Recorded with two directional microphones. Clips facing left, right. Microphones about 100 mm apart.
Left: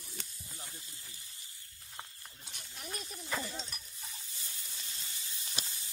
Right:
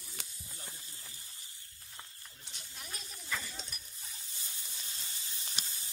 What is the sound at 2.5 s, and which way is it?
Speech, 50° left (ahead or behind).